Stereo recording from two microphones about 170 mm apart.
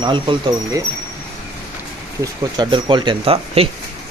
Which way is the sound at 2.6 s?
25° right (ahead or behind).